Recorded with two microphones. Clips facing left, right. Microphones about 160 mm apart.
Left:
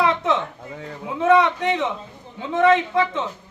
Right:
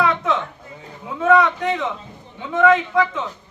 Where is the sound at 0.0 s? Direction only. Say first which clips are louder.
Even; 25° left (ahead or behind).